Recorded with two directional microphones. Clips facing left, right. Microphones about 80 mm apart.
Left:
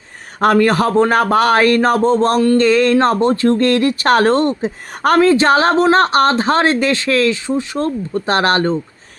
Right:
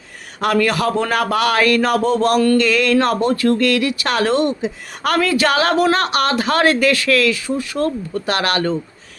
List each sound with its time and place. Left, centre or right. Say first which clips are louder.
0.3 s speech: left 5 dB; left